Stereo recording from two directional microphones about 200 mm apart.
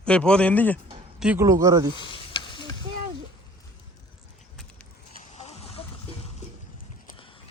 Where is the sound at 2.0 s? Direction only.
25° left (ahead or behind).